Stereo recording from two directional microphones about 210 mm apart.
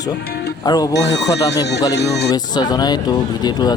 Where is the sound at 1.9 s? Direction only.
55° left (ahead or behind).